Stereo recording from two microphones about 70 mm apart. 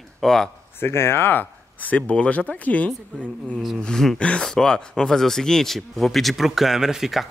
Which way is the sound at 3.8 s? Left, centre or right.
Centre.